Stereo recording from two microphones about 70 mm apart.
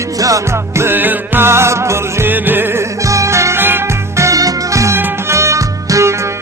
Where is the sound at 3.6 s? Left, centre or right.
Right.